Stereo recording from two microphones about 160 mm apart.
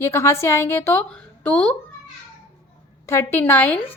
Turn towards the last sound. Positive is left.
turn(degrees=15)  # may be behind; listen again after turning